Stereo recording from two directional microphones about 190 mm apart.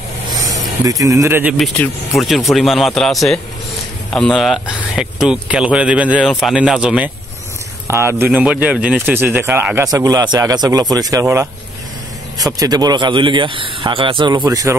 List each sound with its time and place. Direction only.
0.5 s speech: 20° right (ahead or behind)
1.6 s speech: centre (ahead or behind); by 11.2 s 20° right (ahead or behind)
12.4 s speech: 20° right (ahead or behind)